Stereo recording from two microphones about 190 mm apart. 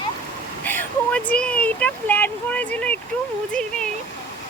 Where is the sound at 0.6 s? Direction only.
10° left (ahead or behind).